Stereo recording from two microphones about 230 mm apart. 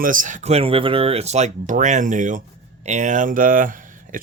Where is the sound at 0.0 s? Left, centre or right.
Right.